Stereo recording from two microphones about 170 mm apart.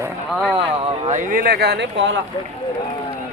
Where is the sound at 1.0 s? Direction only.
50° right (ahead or behind); by 2.2 s 90° right.